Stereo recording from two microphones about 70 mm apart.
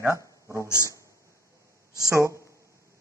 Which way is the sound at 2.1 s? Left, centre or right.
Right.